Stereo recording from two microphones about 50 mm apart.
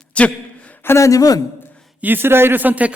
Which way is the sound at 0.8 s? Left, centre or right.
Left.